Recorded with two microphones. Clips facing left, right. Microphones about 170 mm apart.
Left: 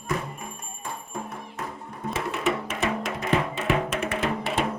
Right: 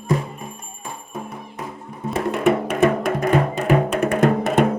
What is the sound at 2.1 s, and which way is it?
Music, 50° right (ahead or behind).